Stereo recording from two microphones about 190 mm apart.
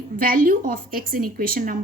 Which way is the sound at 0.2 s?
50° right (ahead or behind).